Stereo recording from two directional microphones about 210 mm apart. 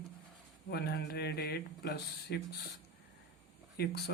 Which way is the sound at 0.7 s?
50° left (ahead or behind).